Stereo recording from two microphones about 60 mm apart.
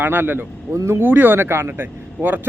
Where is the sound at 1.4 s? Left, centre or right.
Right.